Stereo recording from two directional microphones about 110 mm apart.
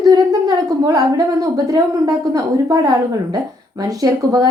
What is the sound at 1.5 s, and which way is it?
A woman's voice, 35° right (ahead or behind).